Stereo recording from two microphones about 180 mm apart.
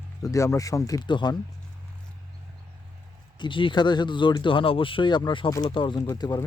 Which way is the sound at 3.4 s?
25° left (ahead or behind).